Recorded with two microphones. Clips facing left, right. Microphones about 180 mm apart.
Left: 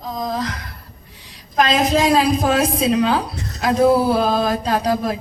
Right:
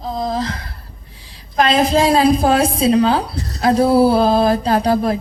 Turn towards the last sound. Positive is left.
turn(degrees=-30)  # may be behind; listen again after turning